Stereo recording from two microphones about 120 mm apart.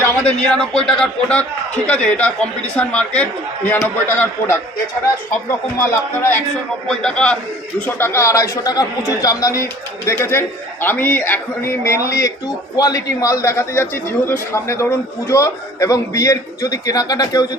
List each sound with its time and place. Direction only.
0.3 s a man's voice: 5° left (ahead or behind)
5.8 s a man's voice: 20° left (ahead or behind)
6.8 s a man's voice: 5° left (ahead or behind); by 17.4 s 30° left (ahead or behind)